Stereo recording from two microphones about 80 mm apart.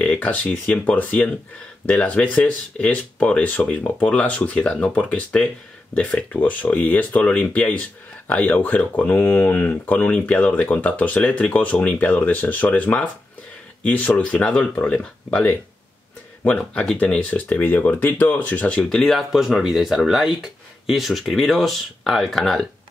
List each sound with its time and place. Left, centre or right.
0.0 s speech: centre
17.0 s speech: centre